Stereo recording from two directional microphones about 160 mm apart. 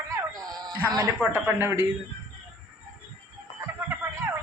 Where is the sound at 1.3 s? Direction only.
15° right (ahead or behind).